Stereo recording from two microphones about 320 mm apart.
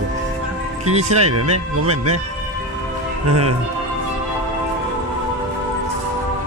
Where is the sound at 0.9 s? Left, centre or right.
Right.